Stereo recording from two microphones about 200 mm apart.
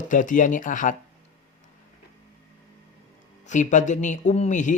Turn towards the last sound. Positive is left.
turn(degrees=40)  # may be behind; listen again after turning